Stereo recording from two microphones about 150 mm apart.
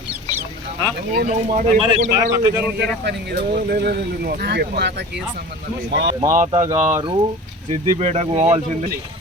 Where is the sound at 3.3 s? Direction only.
90° right.